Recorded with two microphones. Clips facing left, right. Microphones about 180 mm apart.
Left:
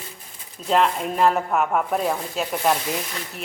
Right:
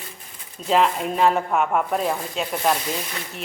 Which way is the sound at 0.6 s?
Centre (ahead or behind).